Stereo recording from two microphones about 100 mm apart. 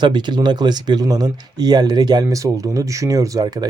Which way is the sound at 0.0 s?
50° right (ahead or behind).